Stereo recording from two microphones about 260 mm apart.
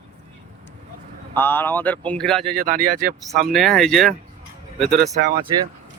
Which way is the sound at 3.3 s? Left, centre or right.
Centre.